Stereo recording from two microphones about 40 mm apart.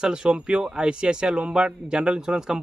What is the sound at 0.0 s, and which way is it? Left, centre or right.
Speech, right.